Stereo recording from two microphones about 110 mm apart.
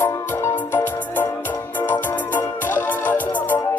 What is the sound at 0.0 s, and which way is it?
Music, 25° left (ahead or behind).